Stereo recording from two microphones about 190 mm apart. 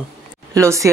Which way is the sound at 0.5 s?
15° right (ahead or behind).